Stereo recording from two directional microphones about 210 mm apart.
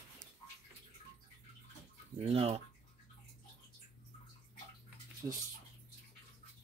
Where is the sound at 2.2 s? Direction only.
25° right (ahead or behind).